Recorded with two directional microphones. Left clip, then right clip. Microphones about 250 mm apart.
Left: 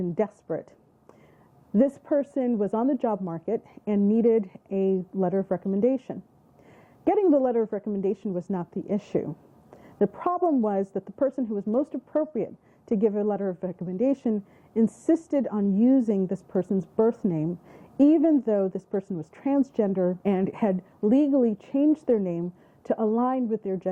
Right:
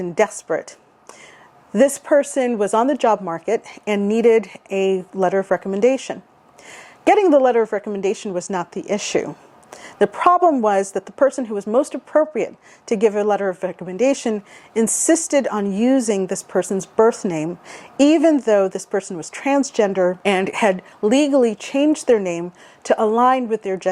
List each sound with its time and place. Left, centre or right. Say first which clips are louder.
0.5 s speech: right 9 dB; centre
1.7 s a woman's voice: right 9 dB; centre
10.7 s a woman's voice: right 10 dB; centre
11.5 s speech: right 8 dB; centre
12.4 s speech: right 8 dB; centre
15.1 s a woman's voice: right 9 dB; centre